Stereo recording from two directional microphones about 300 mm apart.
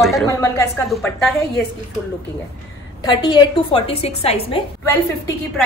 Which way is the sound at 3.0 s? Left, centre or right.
Centre.